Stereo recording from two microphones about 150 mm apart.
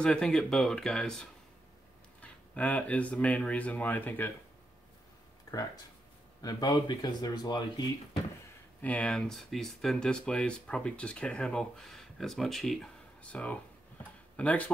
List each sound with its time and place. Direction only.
0.0 s speech: 5° left (ahead or behind)
6.4 s speech: 30° left (ahead or behind)
8.8 s speech: 10° left (ahead or behind)